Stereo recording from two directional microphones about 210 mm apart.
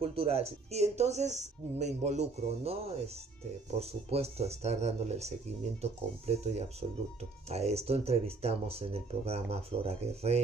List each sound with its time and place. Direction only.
0.0 s speech: 25° right (ahead or behind)